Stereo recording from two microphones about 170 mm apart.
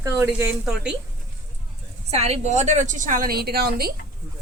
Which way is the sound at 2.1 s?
40° right (ahead or behind).